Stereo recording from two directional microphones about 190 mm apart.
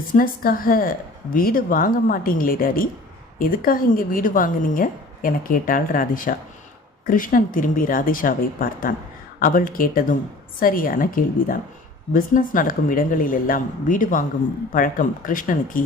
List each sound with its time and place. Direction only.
0.1 s a woman's voice: 50° left (ahead or behind)